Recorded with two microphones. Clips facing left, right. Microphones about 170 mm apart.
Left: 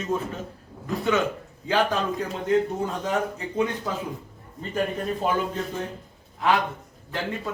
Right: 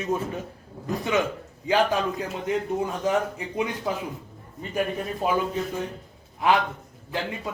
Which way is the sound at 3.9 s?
15° right (ahead or behind).